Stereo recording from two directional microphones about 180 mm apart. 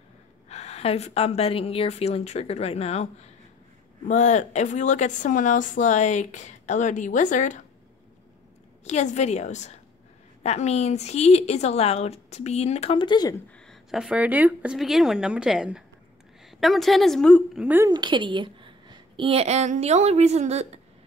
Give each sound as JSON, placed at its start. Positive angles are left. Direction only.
{"t": 0.5, "sound": "a woman's voice", "side_deg": 35}
{"t": 4.1, "sound": "speech", "side_deg": 40}
{"t": 8.8, "sound": "a woman's voice", "side_deg": 40}
{"t": 13.7, "sound": "speech", "side_deg": -5}
{"t": 17.6, "sound": "a woman's voice", "side_deg": -15}
{"t": 17.9, "sound": "a woman's voice", "side_deg": -25}